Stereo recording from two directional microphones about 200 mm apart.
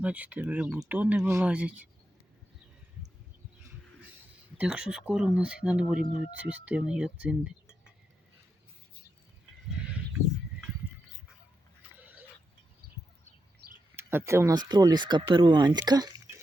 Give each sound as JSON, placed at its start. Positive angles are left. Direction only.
{"t": 0.0, "sound": "speech", "side_deg": -5}
{"t": 4.5, "sound": "speech", "side_deg": -5}
{"t": 13.9, "sound": "speech", "side_deg": -10}